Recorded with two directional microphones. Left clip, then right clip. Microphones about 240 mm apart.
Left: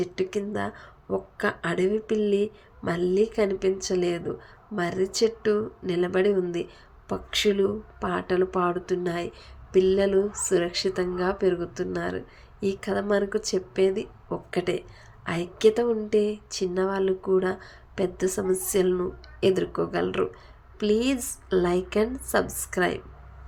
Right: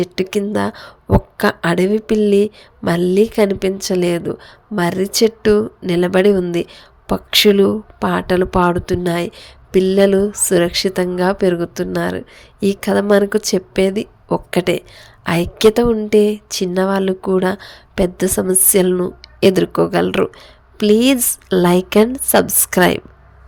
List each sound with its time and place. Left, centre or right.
0.0 s speech: right